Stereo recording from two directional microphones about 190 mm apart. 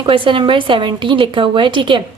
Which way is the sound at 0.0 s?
25° right (ahead or behind).